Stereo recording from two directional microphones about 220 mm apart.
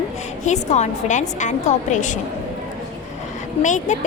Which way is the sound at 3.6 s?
35° left (ahead or behind).